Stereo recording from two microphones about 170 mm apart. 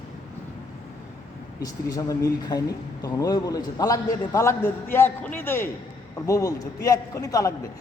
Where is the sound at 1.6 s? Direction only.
20° left (ahead or behind).